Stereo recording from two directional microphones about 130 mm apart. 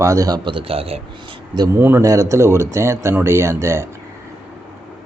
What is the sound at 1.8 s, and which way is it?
Speech, 15° right (ahead or behind).